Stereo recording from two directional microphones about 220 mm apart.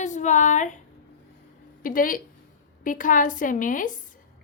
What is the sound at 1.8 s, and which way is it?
A woman's voice, 40° left (ahead or behind).